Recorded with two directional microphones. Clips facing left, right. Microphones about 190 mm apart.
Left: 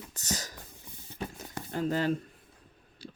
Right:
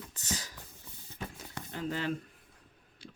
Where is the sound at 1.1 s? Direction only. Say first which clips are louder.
Left 4 dB; 40° left (ahead or behind).